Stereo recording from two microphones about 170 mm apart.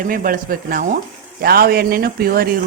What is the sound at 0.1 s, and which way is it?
Speech, 55° right (ahead or behind).